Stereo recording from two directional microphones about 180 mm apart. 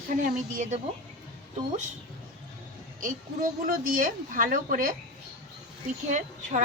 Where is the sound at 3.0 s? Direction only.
45° right (ahead or behind).